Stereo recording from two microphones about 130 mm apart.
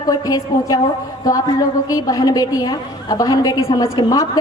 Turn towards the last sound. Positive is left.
turn(degrees=30)  # may be behind; listen again after turning